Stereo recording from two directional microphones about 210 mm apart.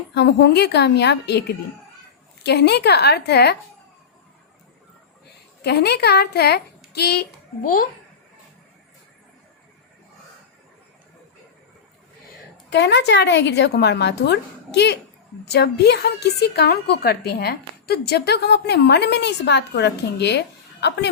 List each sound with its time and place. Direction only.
0.1 s a woman's voice: 55° left (ahead or behind)
5.6 s a woman's voice: 50° left (ahead or behind)
12.7 s a woman's voice: 55° left (ahead or behind)